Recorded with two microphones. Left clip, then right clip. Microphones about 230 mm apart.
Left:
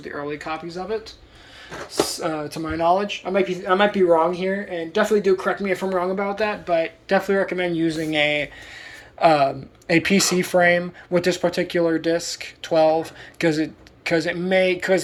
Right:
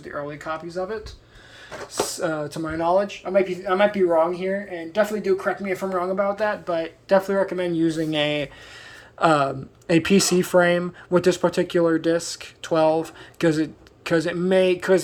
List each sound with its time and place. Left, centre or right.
0.0 s speech: right
2.0 s a man's voice: right